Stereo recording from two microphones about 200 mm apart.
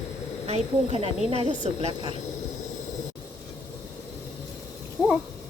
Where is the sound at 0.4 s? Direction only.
30° right (ahead or behind).